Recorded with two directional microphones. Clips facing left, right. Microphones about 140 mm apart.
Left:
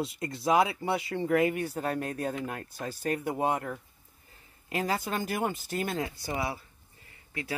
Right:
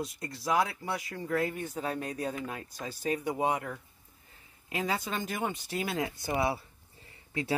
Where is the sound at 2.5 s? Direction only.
60° left (ahead or behind).